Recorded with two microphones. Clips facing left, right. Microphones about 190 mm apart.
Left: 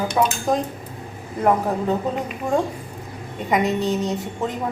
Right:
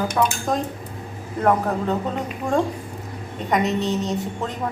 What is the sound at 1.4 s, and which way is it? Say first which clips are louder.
Speech: even; 10° left (ahead or behind).